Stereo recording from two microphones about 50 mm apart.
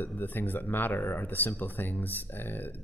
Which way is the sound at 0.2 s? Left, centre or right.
Left.